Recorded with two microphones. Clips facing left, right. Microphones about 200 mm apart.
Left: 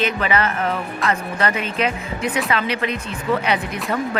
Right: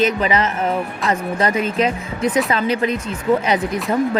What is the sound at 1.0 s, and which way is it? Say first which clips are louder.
Speech: right 1 dB; centre (ahead or behind).